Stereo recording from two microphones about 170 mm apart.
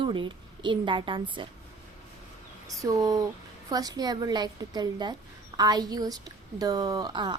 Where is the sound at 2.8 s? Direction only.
20° right (ahead or behind).